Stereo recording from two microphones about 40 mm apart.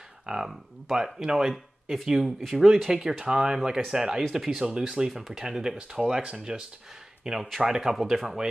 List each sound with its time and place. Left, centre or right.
0.3 s speech: right
1.2 s speech: centre
1.5 s speech: centre
4.3 s speech: centre